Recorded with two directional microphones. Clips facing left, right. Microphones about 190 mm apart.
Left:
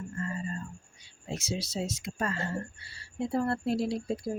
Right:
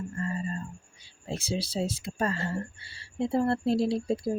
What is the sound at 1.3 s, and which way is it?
A woman's voice, 30° right (ahead or behind).